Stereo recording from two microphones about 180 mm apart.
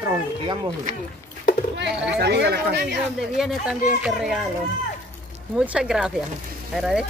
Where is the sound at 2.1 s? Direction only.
65° right (ahead or behind).